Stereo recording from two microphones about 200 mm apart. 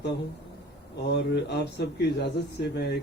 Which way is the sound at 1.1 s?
55° left (ahead or behind).